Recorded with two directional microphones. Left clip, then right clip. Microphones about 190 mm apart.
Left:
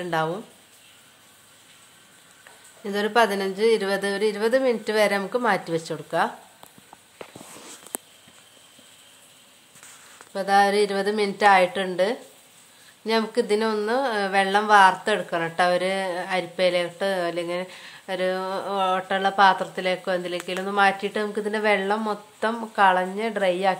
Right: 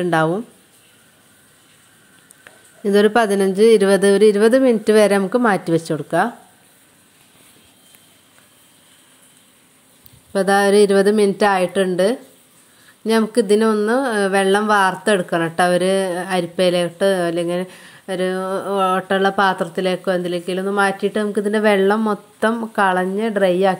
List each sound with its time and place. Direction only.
0.0 s a woman's voice: 30° right (ahead or behind)
2.8 s a woman's voice: 35° right (ahead or behind)
10.3 s speech: 40° right (ahead or behind)